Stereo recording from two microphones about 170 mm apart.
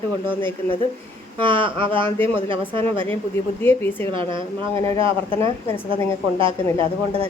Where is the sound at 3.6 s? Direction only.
15° left (ahead or behind).